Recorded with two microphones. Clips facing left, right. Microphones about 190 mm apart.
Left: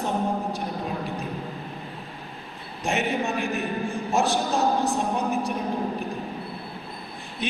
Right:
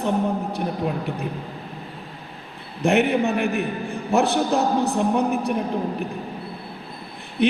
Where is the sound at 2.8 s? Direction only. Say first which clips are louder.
Right 7 dB; 60° right (ahead or behind).